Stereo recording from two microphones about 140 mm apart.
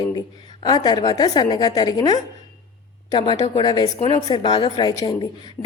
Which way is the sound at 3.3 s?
50° left (ahead or behind).